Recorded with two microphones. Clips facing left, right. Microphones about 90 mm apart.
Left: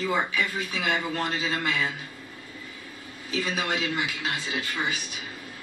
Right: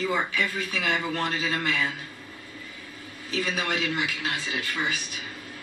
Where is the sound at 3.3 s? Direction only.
25° left (ahead or behind).